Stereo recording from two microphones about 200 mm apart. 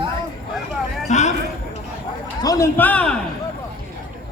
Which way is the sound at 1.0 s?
35° left (ahead or behind).